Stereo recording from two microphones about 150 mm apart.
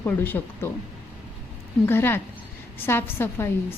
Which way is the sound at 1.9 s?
15° left (ahead or behind).